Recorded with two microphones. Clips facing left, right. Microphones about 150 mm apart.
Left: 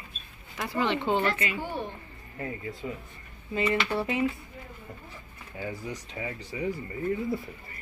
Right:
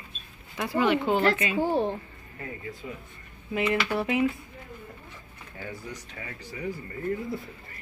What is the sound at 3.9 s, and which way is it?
Speech, 15° right (ahead or behind).